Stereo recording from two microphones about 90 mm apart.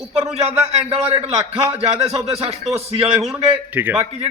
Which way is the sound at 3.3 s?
15° right (ahead or behind).